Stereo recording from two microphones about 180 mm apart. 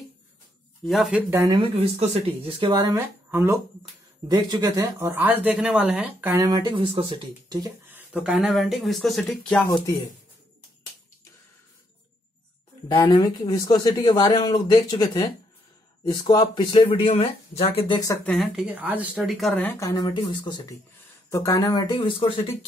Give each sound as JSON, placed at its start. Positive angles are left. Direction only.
{"t": 0.8, "sound": "speech", "side_deg": 0}
{"t": 1.5, "sound": "speech", "side_deg": -30}
{"t": 3.3, "sound": "speech", "side_deg": -15}
{"t": 6.7, "sound": "speech", "side_deg": -30}
{"t": 7.9, "sound": "speech", "side_deg": -5}
{"t": 12.8, "sound": "speech", "side_deg": 25}
{"t": 18.2, "sound": "speech", "side_deg": 0}
{"t": 19.6, "sound": "speech", "side_deg": 15}